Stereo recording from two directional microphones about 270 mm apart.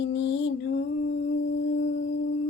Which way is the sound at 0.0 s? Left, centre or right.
Left.